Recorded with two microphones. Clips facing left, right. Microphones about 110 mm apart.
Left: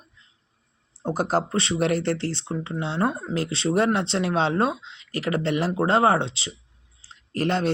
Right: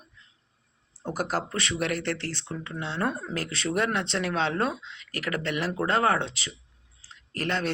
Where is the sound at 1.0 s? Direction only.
25° left (ahead or behind).